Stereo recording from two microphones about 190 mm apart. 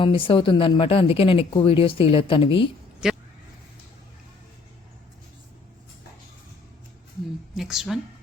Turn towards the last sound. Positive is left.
turn(degrees=0)  # may be behind; listen again after turning